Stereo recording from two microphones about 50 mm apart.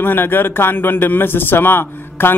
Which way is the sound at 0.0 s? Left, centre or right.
Left.